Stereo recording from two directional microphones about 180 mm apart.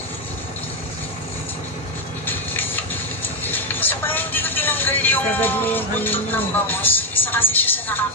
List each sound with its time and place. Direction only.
3.4 s vehicle: 10° left (ahead or behind)